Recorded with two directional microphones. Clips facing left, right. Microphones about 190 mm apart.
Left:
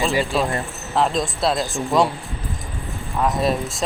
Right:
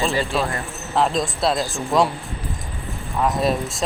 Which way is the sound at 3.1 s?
Centre (ahead or behind).